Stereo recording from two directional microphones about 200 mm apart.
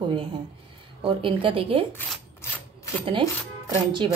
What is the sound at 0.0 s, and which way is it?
A woman's voice, 25° right (ahead or behind).